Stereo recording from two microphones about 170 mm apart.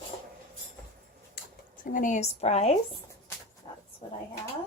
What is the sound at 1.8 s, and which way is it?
Speech, 50° left (ahead or behind).